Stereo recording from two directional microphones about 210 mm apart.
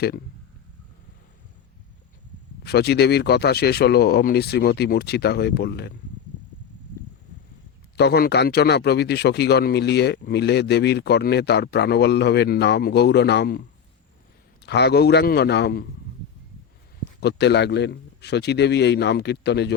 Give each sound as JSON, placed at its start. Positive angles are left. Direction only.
{"t": 2.6, "sound": "speech", "side_deg": 50}
{"t": 7.9, "sound": "speech", "side_deg": 50}
{"t": 14.6, "sound": "speech", "side_deg": 55}
{"t": 17.2, "sound": "speech", "side_deg": 55}